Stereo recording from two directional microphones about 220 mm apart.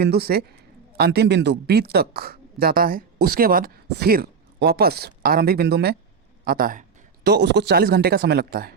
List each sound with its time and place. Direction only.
0.0 s a man's voice: 45° right (ahead or behind)